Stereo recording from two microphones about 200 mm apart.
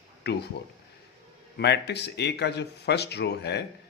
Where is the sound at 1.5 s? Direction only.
55° left (ahead or behind).